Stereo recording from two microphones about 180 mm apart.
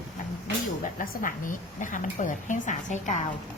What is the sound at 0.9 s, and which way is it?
A woman's voice, 50° left (ahead or behind).